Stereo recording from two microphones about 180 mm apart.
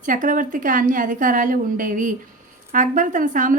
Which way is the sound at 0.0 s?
45° right (ahead or behind).